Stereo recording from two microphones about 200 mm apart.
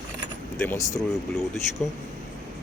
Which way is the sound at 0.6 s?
15° left (ahead or behind).